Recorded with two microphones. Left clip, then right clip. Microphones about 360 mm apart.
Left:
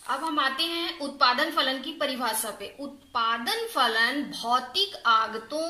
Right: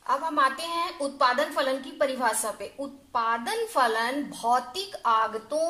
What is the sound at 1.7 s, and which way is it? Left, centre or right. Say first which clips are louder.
A woman's voice: right 2 dB; centre.